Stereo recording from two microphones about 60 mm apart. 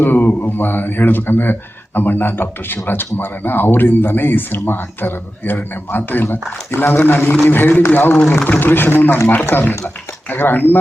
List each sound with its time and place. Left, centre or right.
0.0 s speech: left